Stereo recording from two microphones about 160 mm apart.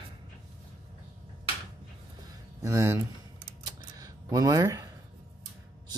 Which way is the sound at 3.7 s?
20° right (ahead or behind).